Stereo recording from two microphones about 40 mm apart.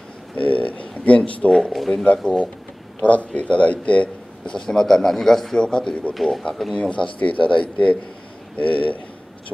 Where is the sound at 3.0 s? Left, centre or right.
Left.